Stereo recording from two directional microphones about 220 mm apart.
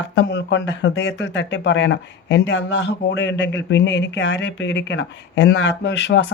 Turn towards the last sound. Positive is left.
turn(degrees=50)  # may be behind; listen again after turning